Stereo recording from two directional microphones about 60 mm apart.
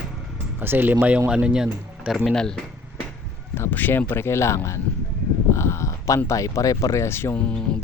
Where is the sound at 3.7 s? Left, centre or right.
Left.